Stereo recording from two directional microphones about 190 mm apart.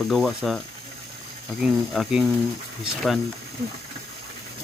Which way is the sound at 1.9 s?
Centre (ahead or behind).